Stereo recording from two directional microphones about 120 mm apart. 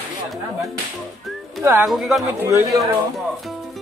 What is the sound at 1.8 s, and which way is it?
Speech, centre (ahead or behind).